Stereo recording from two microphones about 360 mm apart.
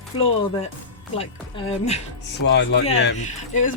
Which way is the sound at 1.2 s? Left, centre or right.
Centre.